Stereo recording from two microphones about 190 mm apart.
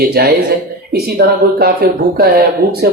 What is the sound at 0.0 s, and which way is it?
A man's voice, 55° right (ahead or behind).